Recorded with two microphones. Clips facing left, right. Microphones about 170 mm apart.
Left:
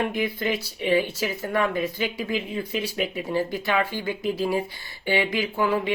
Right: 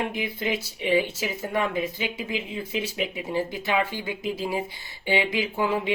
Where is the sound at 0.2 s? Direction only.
20° right (ahead or behind).